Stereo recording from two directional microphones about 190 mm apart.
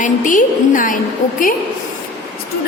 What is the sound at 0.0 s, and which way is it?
Speech, 45° left (ahead or behind).